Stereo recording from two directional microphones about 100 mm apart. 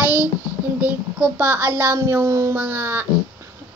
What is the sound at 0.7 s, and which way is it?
A child's voice, 15° right (ahead or behind).